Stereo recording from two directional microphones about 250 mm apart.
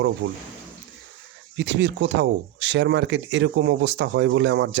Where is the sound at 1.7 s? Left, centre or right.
Right.